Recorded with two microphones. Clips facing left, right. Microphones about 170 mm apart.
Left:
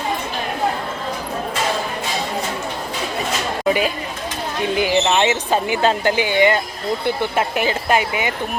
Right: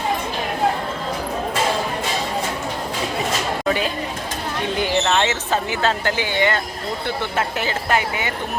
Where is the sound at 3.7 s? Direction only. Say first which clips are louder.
Left 4 dB; 10° left (ahead or behind).